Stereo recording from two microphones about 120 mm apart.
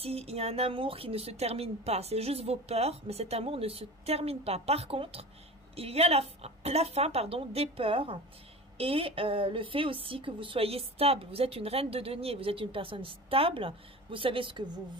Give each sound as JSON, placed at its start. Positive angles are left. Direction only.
{"t": 0.0, "sound": "a woman's voice", "side_deg": -55}